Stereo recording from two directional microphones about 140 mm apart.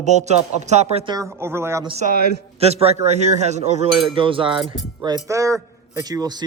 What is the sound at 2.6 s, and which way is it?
A man's voice, 45° right (ahead or behind).